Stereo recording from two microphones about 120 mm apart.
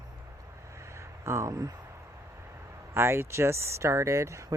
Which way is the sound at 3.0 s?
20° right (ahead or behind).